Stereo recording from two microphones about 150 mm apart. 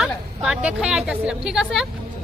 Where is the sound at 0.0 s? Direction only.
5° right (ahead or behind).